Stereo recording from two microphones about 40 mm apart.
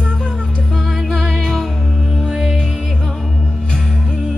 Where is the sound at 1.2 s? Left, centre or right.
Centre.